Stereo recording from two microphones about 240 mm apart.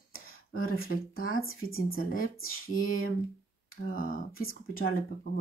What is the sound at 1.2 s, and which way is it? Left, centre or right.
Speech, left.